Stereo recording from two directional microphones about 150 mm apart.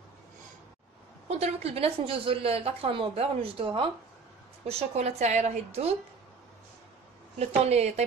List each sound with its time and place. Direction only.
1.4 s a woman's voice: 45° right (ahead or behind)
7.3 s a woman's voice: 45° right (ahead or behind)